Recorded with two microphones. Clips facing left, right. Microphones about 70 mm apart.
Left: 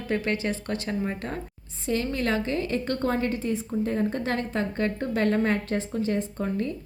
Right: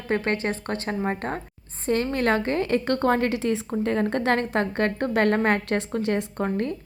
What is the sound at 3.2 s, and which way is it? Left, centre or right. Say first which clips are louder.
A woman's voice: right 3 dB; right.